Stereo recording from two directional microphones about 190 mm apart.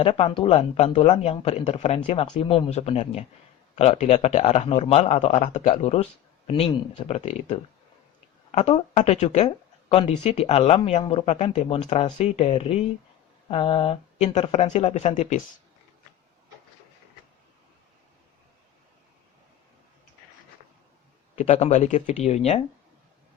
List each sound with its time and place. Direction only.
0.0 s speech: 30° left (ahead or behind)
21.3 s speech: 35° left (ahead or behind)